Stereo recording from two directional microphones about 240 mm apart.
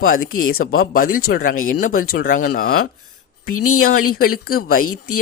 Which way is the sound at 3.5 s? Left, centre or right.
Left.